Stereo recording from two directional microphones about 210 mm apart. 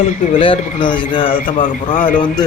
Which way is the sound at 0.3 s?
25° left (ahead or behind).